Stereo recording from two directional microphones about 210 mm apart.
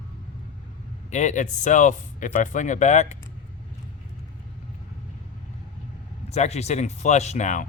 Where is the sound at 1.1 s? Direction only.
35° left (ahead or behind).